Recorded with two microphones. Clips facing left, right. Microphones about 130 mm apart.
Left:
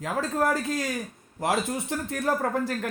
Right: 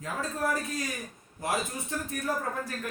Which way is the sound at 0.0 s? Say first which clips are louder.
Left 6 dB; 80° left.